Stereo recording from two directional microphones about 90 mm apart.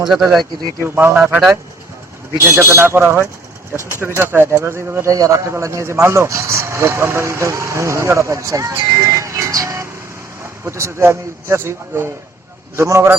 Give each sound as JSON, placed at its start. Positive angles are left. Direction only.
{"t": 0.0, "sound": "speech", "side_deg": -5}
{"t": 0.8, "sound": "a man's voice", "side_deg": -25}
{"t": 2.4, "sound": "a man's voice", "side_deg": -30}